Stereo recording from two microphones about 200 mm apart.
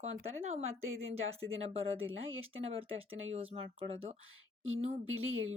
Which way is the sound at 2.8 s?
30° right (ahead or behind).